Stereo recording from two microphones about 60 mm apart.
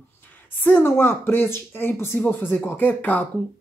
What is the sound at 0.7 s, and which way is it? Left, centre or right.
A woman's voice, left.